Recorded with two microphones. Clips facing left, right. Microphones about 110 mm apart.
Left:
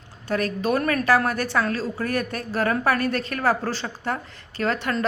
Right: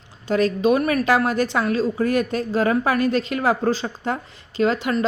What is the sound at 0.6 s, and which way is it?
A woman's voice, 15° right (ahead or behind).